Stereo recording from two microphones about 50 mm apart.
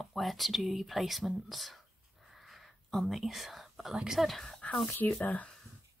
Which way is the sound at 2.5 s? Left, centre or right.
Centre.